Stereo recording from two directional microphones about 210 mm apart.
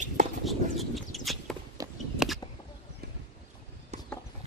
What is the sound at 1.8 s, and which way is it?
Walk, 15° right (ahead or behind).